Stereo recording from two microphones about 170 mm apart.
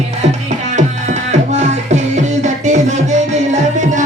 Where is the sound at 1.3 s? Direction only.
40° right (ahead or behind).